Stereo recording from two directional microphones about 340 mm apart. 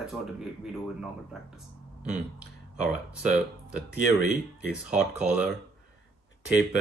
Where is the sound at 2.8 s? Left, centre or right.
Right.